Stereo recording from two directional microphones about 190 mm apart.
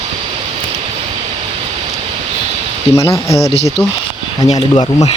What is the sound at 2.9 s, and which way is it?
Speech, 15° left (ahead or behind).